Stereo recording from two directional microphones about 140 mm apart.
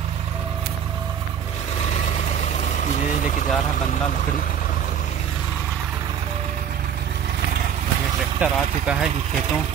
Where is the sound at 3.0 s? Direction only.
60° left (ahead or behind).